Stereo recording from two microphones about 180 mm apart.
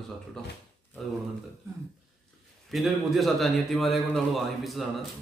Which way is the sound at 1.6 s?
15° right (ahead or behind).